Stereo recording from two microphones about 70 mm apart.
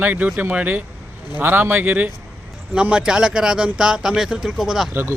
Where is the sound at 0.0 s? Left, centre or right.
Right.